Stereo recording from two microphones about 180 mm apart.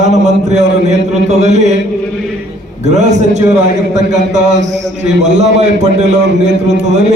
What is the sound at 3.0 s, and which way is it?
Speech, 40° right (ahead or behind).